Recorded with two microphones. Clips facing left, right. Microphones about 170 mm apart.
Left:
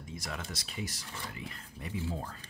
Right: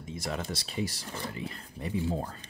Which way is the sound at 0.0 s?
25° right (ahead or behind).